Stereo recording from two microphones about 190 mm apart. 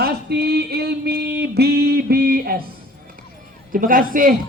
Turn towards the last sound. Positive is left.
turn(degrees=-45)  # may be behind; listen again after turning